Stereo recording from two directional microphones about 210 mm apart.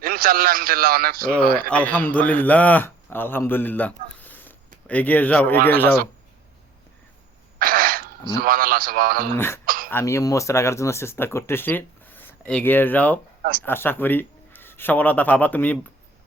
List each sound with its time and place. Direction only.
0.0 s a man's voice: 45° right (ahead or behind)
1.7 s speech: 5° left (ahead or behind)
4.2 s a sound: 10° left (ahead or behind)
5.6 s speech: 10° left (ahead or behind)
7.6 s sneeze: 45° right (ahead or behind)
8.4 s a man's voice: 45° right (ahead or behind)
9.3 s speech: 10° left (ahead or behind)
9.6 s throat clearing: 40° right (ahead or behind)
9.9 s a man's voice: 15° left (ahead or behind)